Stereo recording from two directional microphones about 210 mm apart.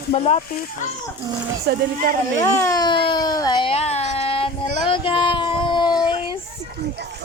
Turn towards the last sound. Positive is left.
turn(degrees=20)  # may be behind; listen again after turning